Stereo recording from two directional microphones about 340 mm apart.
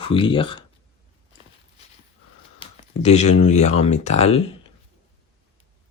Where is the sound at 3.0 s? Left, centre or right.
Centre.